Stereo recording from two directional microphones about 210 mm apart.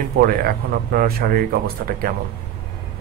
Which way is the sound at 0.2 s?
45° right (ahead or behind).